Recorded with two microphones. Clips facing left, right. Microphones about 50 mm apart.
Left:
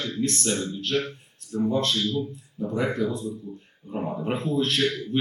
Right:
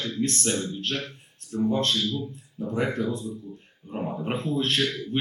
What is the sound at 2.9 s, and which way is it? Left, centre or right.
Speech, right.